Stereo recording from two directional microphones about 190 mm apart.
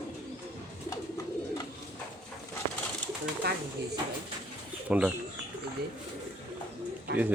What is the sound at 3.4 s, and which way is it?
Speech, 60° right (ahead or behind).